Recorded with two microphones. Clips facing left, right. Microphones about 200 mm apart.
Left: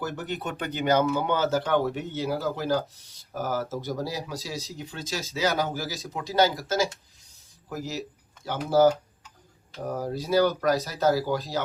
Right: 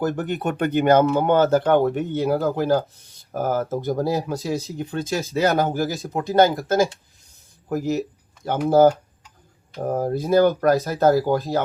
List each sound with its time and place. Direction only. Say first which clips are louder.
0.0 s speech: right 8 dB; 50° right (ahead or behind)